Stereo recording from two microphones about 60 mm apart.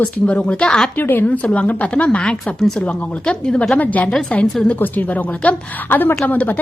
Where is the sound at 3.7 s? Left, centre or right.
Left.